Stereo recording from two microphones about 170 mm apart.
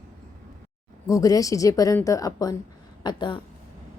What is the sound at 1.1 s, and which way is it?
A woman's voice, 20° left (ahead or behind).